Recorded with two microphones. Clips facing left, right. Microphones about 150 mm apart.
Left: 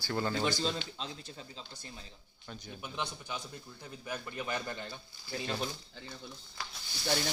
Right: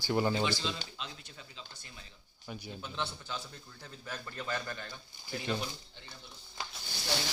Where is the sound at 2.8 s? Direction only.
15° left (ahead or behind).